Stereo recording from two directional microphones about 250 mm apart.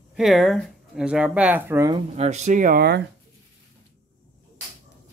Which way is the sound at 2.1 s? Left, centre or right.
Right.